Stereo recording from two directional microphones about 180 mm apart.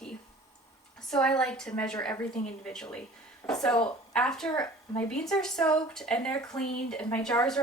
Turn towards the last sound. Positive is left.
turn(degrees=5)  # may be behind; listen again after turning